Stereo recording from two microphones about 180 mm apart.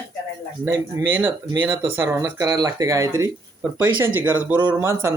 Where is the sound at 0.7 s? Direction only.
15° right (ahead or behind).